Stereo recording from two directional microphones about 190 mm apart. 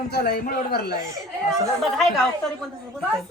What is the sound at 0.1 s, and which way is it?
Speech, 55° left (ahead or behind).